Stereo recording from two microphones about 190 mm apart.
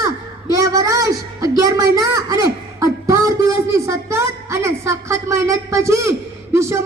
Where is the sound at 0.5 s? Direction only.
15° right (ahead or behind).